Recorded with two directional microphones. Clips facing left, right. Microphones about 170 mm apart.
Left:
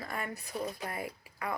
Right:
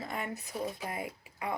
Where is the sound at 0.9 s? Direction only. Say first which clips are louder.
Right 1 dB; 20° right (ahead or behind).